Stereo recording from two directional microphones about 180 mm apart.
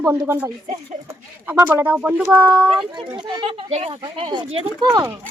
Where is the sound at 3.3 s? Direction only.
30° right (ahead or behind).